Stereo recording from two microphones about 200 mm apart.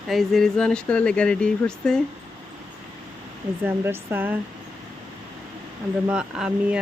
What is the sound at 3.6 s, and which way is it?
Speech, 10° right (ahead or behind).